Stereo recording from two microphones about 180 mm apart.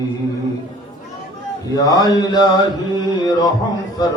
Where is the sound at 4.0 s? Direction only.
20° left (ahead or behind).